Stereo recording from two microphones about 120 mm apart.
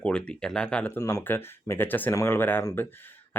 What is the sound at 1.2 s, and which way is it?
Speech, 15° left (ahead or behind).